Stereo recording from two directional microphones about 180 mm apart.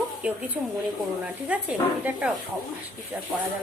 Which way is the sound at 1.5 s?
5° right (ahead or behind).